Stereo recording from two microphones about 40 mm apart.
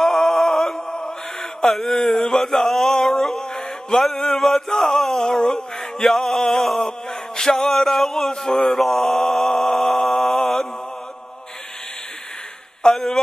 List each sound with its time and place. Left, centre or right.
0.0 s mantra: centre
4.2 s male singing: centre
6.8 s a sound: centre
12.8 s speech: centre